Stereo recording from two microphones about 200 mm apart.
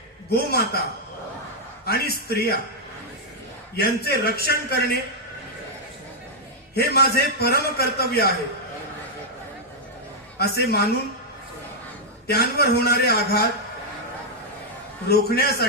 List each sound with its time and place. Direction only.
0.3 s a man's voice: 50° left (ahead or behind)
1.8 s a man's voice: 50° left (ahead or behind)
3.8 s a man's voice: 50° left (ahead or behind)
6.7 s a man's voice: 50° left (ahead or behind)
10.3 s a man's voice: 50° left (ahead or behind)
12.3 s a man's voice: 50° left (ahead or behind)
15.1 s a man's voice: 50° left (ahead or behind)